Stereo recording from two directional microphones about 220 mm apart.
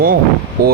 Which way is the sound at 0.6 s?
45° right (ahead or behind).